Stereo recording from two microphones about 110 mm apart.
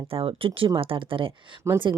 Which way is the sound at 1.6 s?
25° right (ahead or behind).